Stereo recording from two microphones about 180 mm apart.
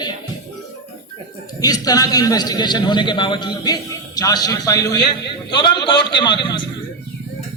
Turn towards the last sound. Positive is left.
turn(degrees=25)  # may be behind; listen again after turning